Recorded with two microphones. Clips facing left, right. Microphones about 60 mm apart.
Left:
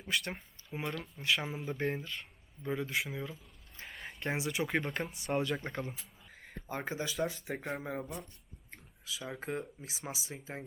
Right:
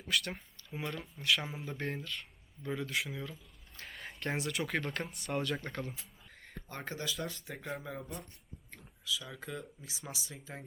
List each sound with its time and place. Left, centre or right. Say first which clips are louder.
0.1 s speech: even; centre
1.4 s speech: left 3 dB; centre
1.8 s speech: left 3 dB; centre
3.8 s a sound: left 1 dB; centre
4.2 s speech: left 1 dB; centre
6.0 s a sound: left 1 dB; centre
7.4 s speech: left 3 dB; left